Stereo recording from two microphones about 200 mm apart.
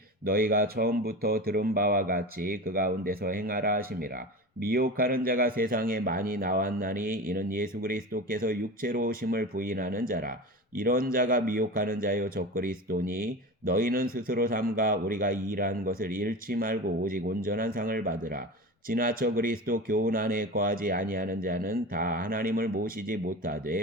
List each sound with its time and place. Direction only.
0.3 s speech: 45° right (ahead or behind)